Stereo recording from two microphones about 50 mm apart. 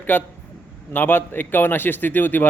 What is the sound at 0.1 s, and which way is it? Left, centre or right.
A man's voice, left.